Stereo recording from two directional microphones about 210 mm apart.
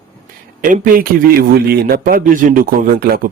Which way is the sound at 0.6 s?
40° right (ahead or behind).